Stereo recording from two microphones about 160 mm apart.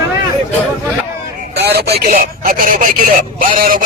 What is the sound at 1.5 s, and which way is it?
Speech, 90° right.